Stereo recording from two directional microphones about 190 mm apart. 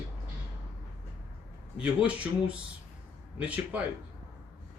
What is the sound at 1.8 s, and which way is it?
Speech, 5° right (ahead or behind).